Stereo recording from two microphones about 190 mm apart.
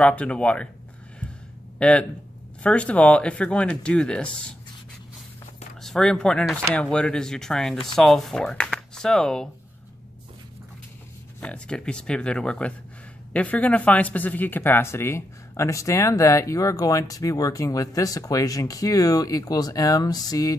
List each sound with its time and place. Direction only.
0.0 s speech: 5° left (ahead or behind)
1.8 s speech: 5° left (ahead or behind)
5.8 s speech: 5° left (ahead or behind)
11.4 s speech: 5° left (ahead or behind)